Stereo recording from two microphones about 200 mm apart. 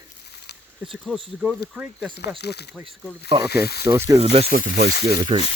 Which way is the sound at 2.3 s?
55° left (ahead or behind).